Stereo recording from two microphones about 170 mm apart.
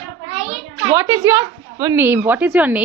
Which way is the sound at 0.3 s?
40° right (ahead or behind).